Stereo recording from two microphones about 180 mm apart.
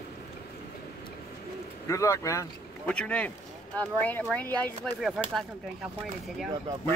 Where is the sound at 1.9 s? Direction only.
15° left (ahead or behind).